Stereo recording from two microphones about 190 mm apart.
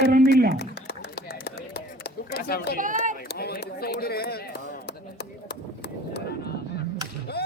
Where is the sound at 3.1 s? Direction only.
55° left (ahead or behind).